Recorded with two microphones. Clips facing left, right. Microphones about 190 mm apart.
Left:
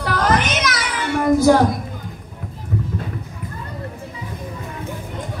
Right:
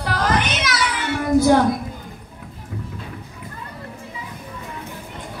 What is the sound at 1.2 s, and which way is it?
Child singing, 45° left (ahead or behind).